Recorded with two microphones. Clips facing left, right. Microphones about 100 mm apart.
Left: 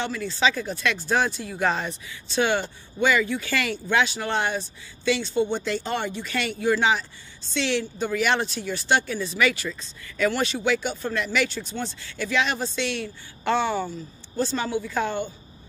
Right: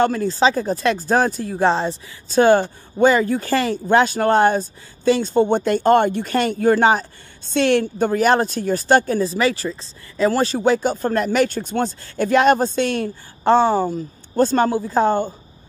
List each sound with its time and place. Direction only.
0.0 s speech: 45° right (ahead or behind)
14.3 s speech: 50° right (ahead or behind)